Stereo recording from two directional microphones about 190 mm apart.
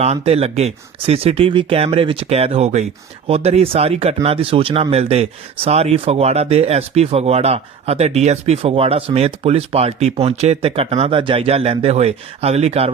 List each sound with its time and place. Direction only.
0.0 s speech: 35° right (ahead or behind)